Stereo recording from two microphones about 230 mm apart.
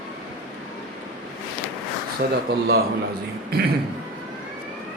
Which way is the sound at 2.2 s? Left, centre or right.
Right.